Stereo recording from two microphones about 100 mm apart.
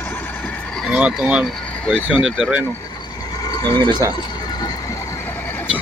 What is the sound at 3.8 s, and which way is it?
Speech, 50° right (ahead or behind).